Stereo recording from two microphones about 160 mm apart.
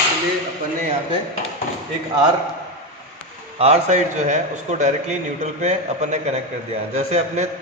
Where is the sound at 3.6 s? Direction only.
45° right (ahead or behind).